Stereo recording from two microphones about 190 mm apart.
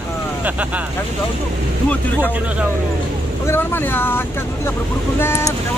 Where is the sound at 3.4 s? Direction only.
10° left (ahead or behind).